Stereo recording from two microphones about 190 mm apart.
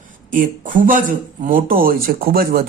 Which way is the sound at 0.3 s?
45° right (ahead or behind).